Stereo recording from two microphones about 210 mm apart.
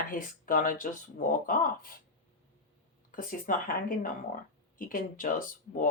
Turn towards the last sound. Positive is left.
turn(degrees=40)  # may be behind; listen again after turning